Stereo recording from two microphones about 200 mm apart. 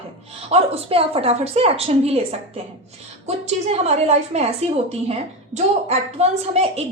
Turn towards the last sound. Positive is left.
turn(degrees=-30)  # may be behind; listen again after turning